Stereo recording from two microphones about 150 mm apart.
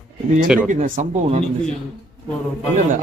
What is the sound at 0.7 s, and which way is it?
Speech, 55° right (ahead or behind).